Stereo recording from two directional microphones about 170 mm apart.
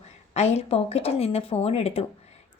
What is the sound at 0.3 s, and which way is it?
A woman's voice, 40° left (ahead or behind).